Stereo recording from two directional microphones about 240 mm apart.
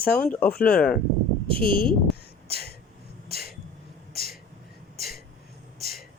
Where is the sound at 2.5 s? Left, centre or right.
Left.